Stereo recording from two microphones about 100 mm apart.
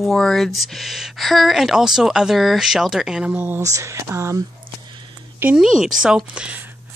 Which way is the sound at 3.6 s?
30° right (ahead or behind).